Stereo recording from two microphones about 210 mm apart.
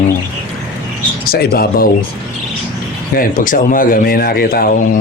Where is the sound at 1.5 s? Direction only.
45° left (ahead or behind).